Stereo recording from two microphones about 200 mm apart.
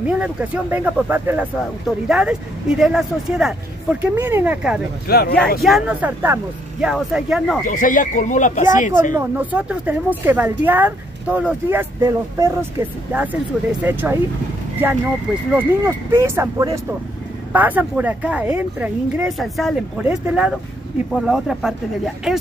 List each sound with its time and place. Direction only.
0.0 s speech: 5° right (ahead or behind)
5.0 s speech: 50° left (ahead or behind)
5.6 s speech: 5° right (ahead or behind)
7.6 s speech: 40° left (ahead or behind)
9.1 s speech: 10° right (ahead or behind)
15.5 s speech: 15° right (ahead or behind)